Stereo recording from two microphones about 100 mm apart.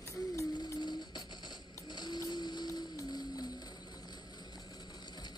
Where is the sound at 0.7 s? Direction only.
45° left (ahead or behind).